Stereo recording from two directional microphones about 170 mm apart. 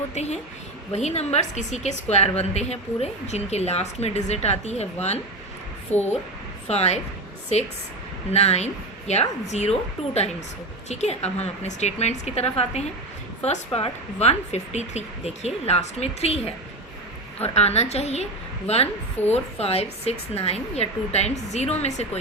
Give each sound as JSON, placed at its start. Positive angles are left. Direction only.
{"t": 0.1, "sound": "a woman's voice", "side_deg": 40}
{"t": 5.9, "sound": "a woman's voice", "side_deg": 10}
{"t": 6.7, "sound": "a woman's voice", "side_deg": 40}
{"t": 10.8, "sound": "a woman's voice", "side_deg": 40}
{"t": 17.4, "sound": "a woman's voice", "side_deg": 40}
{"t": 19.3, "sound": "a woman's voice", "side_deg": 35}